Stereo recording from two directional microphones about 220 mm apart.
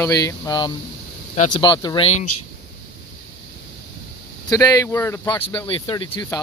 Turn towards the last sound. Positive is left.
turn(degrees=20)  # may be behind; listen again after turning